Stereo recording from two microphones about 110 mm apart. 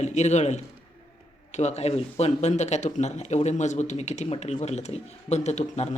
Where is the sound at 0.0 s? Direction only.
90° left.